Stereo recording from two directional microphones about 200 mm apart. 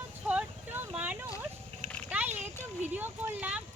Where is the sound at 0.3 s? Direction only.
10° right (ahead or behind).